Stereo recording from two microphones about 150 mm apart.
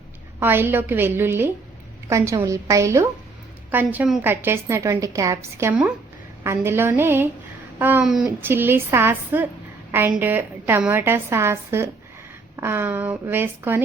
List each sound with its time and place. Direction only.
0.3 s a woman's voice: 15° right (ahead or behind)